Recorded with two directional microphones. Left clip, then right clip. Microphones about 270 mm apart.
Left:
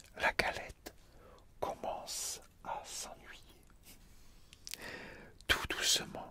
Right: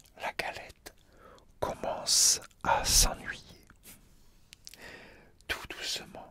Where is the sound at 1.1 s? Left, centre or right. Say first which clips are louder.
Right 6 dB; right.